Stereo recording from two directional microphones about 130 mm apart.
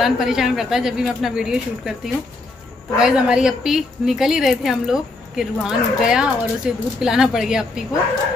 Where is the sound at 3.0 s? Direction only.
5° right (ahead or behind).